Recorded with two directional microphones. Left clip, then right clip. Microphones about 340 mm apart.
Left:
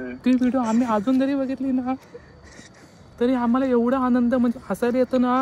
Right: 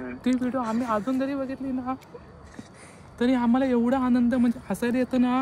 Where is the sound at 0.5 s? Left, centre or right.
Left.